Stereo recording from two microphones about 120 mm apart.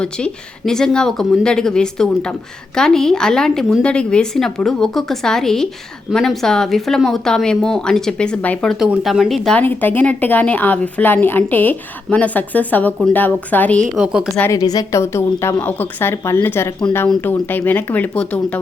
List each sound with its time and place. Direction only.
0.0 s a woman's voice: 5° left (ahead or behind)
8.8 s a woman's voice: 5° right (ahead or behind)
9.6 s a woman's voice: 15° left (ahead or behind)
13.9 s a woman's voice: 5° right (ahead or behind)
14.5 s a woman's voice: 30° left (ahead or behind); by 18.6 s 10° left (ahead or behind)